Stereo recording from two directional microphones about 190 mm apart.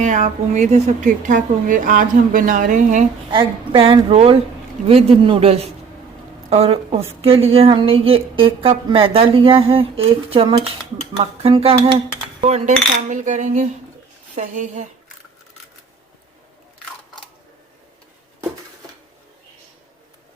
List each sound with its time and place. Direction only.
0.0 s speech: 40° right (ahead or behind)
3.3 s a woman's voice: 25° right (ahead or behind)
4.9 s cutlery: 30° right (ahead or behind)
7.2 s a woman's voice: 30° right (ahead or behind)
12.4 s cutlery: 35° right (ahead or behind)